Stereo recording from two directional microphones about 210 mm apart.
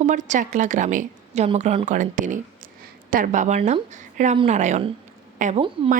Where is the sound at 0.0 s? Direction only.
35° right (ahead or behind).